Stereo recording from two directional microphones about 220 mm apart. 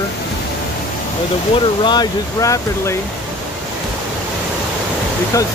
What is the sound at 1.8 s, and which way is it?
Speech, 20° left (ahead or behind).